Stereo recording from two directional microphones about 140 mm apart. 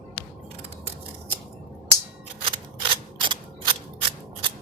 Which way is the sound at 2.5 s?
35° right (ahead or behind).